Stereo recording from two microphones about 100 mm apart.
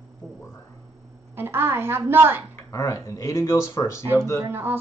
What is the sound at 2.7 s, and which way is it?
Speech, 35° left (ahead or behind).